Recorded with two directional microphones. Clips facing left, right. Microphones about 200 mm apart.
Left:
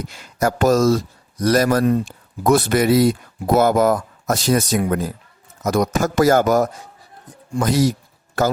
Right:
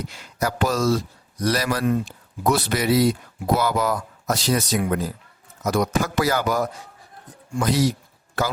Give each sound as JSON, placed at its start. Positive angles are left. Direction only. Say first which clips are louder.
{"t": 0.1, "sound": "speech", "louder": "left 9 dB", "side_deg": 45}